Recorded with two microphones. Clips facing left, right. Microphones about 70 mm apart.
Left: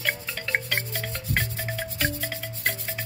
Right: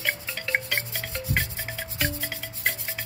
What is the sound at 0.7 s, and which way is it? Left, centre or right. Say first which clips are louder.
Music: left 1 dB; centre.